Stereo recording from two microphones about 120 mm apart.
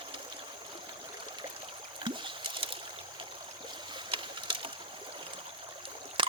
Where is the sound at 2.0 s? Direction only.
45° right (ahead or behind).